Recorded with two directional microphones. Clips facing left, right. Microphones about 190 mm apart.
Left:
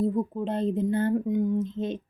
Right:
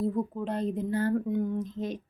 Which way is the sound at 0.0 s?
20° left (ahead or behind).